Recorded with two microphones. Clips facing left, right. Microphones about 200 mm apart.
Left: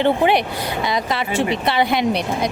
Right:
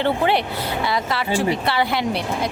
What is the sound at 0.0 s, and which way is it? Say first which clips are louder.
A woman's voice: left 3 dB; 15° left (ahead or behind).